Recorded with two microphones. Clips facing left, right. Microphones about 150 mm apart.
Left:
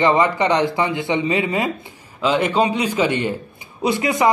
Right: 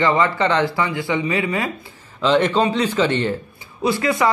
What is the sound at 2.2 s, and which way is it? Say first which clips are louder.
A man's voice: right 1 dB; 10° left (ahead or behind).